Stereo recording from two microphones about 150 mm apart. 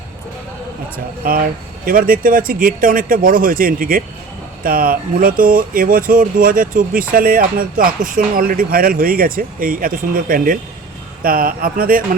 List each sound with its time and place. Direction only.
1.2 s speech: 70° right (ahead or behind)